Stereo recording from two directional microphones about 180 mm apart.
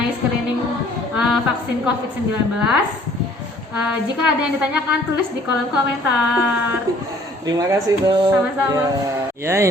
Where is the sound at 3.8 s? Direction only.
5° right (ahead or behind).